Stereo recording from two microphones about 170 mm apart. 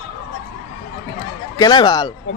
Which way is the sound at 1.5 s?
25° left (ahead or behind).